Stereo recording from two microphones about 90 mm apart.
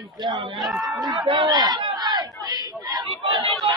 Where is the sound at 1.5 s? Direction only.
50° right (ahead or behind).